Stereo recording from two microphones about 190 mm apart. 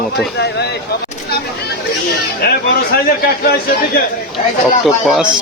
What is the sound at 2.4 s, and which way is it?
Speech, 55° left (ahead or behind).